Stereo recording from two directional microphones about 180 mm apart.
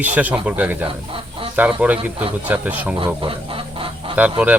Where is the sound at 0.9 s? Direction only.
30° right (ahead or behind).